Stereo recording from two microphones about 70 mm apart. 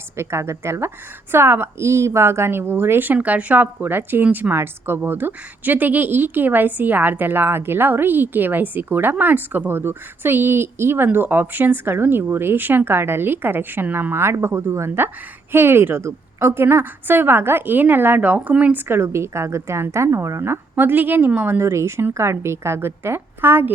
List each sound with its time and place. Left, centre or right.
0.2 s a woman's voice: right
3.2 s a woman's voice: centre
21.6 s a woman's voice: right